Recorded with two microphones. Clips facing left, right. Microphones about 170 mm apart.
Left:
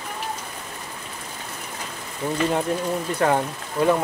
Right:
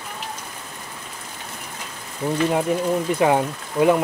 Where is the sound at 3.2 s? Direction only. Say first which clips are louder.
Right 2 dB; 10° right (ahead or behind).